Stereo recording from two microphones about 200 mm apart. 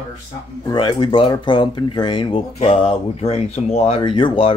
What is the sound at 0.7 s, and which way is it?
Speech, 25° left (ahead or behind).